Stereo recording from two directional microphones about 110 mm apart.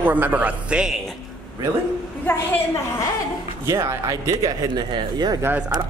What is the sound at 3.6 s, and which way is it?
Speech, 25° right (ahead or behind).